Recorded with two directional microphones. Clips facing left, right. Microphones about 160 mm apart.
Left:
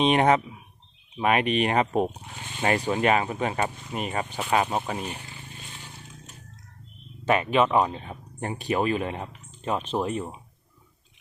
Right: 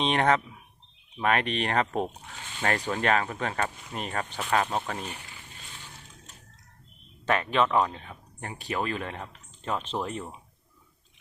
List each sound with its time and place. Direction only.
0.0 s speech: 10° left (ahead or behind)
7.3 s speech: 10° left (ahead or behind)
8.0 s speech: 30° left (ahead or behind)